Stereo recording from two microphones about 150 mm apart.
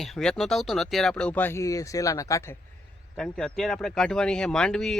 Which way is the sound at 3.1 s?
5° left (ahead or behind).